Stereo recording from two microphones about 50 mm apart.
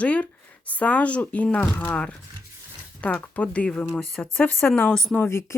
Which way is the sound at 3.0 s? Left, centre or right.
Left.